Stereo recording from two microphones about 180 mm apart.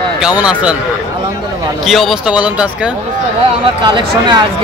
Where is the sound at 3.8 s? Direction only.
25° right (ahead or behind).